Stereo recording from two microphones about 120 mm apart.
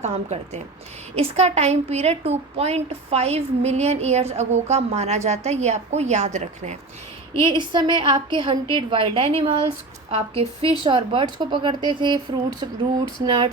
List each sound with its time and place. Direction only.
0.0 s a woman's voice: 70° right (ahead or behind)
7.4 s a woman's voice: 40° right (ahead or behind)